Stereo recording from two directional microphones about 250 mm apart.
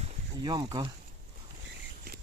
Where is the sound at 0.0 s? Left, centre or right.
Centre.